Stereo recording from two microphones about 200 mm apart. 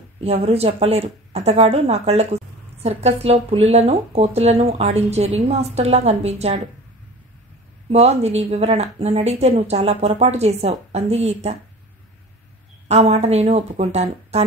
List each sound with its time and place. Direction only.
0.2 s speech: 30° right (ahead or behind)
7.9 s speech: 30° right (ahead or behind)
12.8 s speech: 35° right (ahead or behind)